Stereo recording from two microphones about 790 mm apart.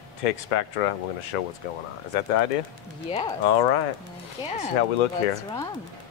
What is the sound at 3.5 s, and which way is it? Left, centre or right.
Speech, left.